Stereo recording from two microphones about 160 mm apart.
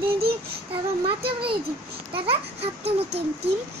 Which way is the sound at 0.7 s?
35° right (ahead or behind).